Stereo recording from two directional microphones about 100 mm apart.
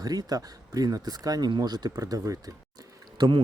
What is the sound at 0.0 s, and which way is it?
Speech, 40° right (ahead or behind).